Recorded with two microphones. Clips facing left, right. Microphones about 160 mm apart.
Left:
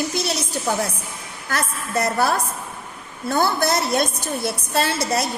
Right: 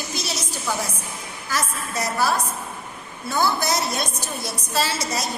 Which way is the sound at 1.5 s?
60° left (ahead or behind).